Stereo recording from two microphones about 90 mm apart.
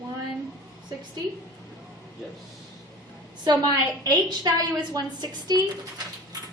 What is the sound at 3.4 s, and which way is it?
A woman's voice, 45° right (ahead or behind).